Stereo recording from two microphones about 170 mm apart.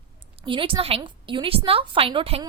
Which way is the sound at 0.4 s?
30° right (ahead or behind).